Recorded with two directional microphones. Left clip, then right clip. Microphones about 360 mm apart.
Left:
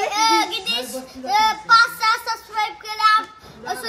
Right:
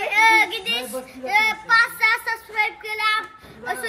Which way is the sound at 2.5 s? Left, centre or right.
Centre.